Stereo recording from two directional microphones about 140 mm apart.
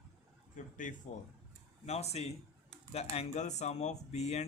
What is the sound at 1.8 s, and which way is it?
Speech, 50° left (ahead or behind).